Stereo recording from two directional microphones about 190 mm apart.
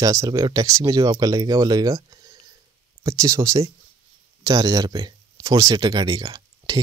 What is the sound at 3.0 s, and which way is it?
Speech, 15° right (ahead or behind).